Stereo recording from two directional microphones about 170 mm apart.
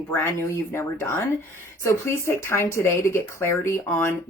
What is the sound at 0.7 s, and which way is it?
Speech, 15° left (ahead or behind).